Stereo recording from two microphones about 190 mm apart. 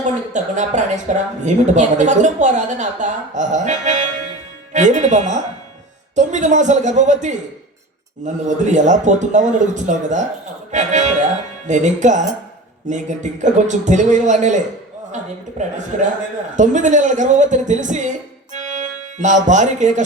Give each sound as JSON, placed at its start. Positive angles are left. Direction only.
{"t": 0.0, "sound": "speech", "side_deg": -40}